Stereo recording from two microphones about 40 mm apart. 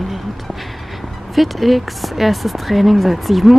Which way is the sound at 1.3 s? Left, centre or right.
Centre.